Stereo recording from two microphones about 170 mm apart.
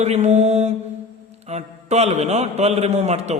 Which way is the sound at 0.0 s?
40° right (ahead or behind).